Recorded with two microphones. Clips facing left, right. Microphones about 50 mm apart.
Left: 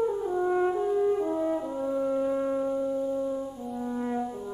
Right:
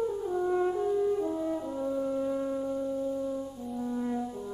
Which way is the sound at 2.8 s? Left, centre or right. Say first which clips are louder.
Left 3 dB; centre.